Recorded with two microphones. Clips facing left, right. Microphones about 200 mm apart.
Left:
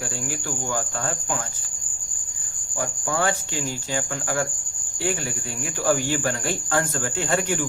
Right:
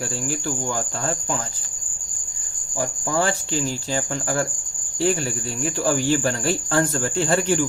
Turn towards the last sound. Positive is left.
turn(degrees=-35)  # may be behind; listen again after turning